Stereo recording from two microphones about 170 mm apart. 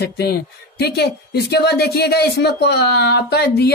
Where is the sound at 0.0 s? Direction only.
70° left (ahead or behind).